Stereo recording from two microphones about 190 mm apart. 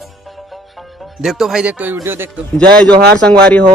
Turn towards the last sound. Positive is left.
turn(degrees=5)  # may be behind; listen again after turning